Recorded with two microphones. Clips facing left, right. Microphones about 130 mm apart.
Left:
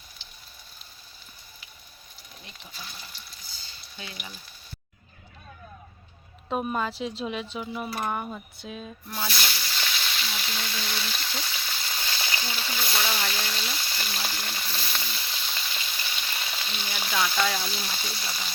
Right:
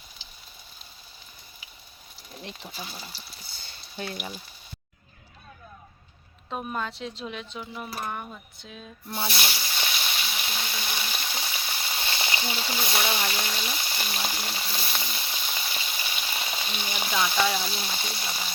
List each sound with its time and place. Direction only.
2.4 s speech: 70° right (ahead or behind)
3.5 s frying: 55° right (ahead or behind)
6.5 s speech: 10° left (ahead or behind)
9.0 s snake: 25° right (ahead or behind)
12.6 s speech: 25° right (ahead or behind)
16.3 s frying: 25° right (ahead or behind)
17.2 s speech: 20° right (ahead or behind)